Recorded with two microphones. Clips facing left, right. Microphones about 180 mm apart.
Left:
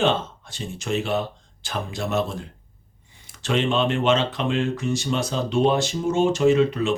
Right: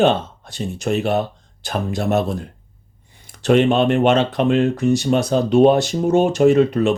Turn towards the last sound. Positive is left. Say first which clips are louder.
# right 4 dB
turn(degrees=-60)  # may be behind; listen again after turning